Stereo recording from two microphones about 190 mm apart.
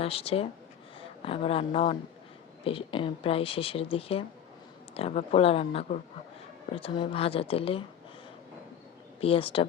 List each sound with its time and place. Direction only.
0.0 s speech: 30° left (ahead or behind)
9.2 s speech: 30° left (ahead or behind)